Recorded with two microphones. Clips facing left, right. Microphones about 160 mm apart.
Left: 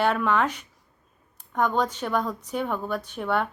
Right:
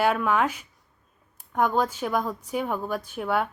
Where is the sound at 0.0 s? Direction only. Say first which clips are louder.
Even; 10° right (ahead or behind).